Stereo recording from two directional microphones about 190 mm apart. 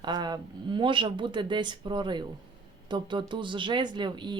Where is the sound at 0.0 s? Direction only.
20° right (ahead or behind).